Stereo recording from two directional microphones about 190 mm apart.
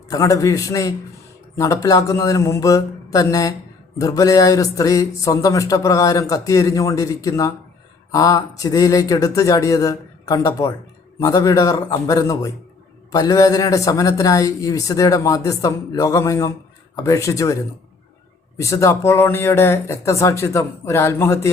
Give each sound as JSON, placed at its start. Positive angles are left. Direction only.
{"t": 0.1, "sound": "speech", "side_deg": 15}